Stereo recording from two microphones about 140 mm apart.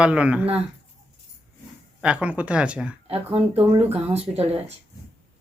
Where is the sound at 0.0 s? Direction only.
10° right (ahead or behind).